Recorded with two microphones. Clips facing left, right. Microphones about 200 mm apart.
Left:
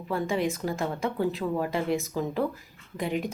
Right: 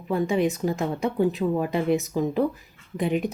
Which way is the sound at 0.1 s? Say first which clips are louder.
Right 5 dB; 20° right (ahead or behind).